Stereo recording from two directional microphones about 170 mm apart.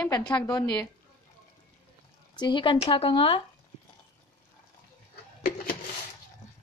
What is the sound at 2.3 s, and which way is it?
Speech, 25° left (ahead or behind).